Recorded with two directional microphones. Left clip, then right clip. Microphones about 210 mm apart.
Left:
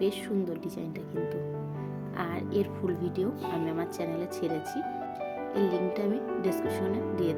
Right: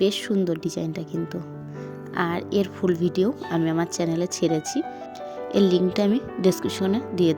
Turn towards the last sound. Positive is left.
turn(degrees=-35)  # may be behind; listen again after turning